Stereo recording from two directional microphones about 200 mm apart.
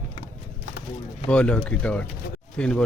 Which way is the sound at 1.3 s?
5° left (ahead or behind).